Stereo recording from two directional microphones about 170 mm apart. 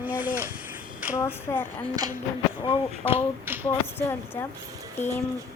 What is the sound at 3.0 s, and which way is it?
Music, 15° right (ahead or behind).